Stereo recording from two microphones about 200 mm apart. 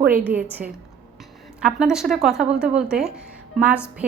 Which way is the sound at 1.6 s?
5° right (ahead or behind).